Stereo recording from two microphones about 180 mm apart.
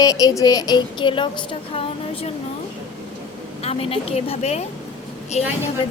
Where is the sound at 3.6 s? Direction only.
35° left (ahead or behind).